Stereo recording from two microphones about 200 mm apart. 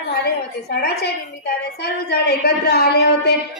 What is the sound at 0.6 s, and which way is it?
A woman's voice, 55° left (ahead or behind).